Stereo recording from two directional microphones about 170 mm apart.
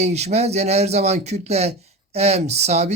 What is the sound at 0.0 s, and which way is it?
Speech, 40° right (ahead or behind).